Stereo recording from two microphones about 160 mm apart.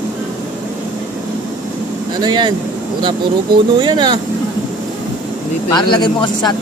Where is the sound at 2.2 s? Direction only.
25° right (ahead or behind).